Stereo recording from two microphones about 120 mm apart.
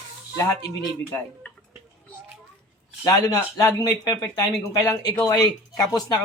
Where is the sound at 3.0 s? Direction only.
25° left (ahead or behind).